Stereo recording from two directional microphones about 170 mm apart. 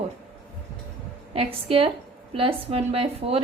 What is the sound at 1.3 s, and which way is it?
A woman's voice, 35° right (ahead or behind).